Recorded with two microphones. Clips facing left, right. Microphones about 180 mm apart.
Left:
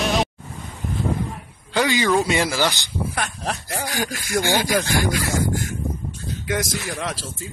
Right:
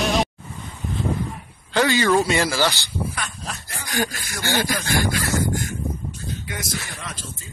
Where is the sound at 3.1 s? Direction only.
65° left (ahead or behind).